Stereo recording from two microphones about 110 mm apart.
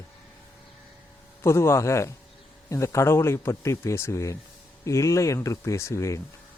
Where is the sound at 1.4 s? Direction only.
25° left (ahead or behind).